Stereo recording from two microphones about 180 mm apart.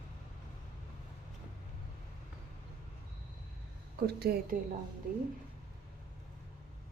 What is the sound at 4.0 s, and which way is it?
Speech, 60° right (ahead or behind).